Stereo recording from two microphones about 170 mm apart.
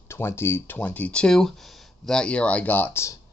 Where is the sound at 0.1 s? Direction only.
15° left (ahead or behind).